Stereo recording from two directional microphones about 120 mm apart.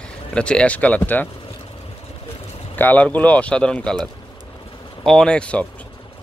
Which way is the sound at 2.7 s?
15° left (ahead or behind).